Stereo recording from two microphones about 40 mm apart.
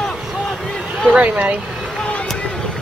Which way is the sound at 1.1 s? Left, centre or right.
Right.